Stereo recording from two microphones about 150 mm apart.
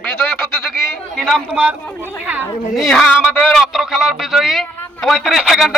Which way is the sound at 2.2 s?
10° right (ahead or behind).